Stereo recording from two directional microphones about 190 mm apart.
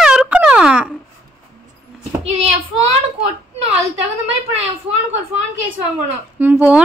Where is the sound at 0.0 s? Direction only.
5° right (ahead or behind).